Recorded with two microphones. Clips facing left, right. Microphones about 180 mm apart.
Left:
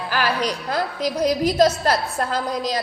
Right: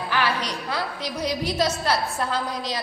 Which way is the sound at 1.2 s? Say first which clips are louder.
Left 7 dB; 45° left (ahead or behind).